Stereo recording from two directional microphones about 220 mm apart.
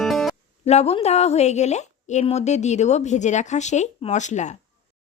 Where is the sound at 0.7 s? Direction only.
30° left (ahead or behind).